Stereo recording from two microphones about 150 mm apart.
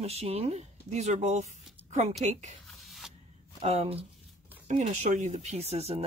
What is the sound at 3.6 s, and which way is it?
Speech, 45° right (ahead or behind).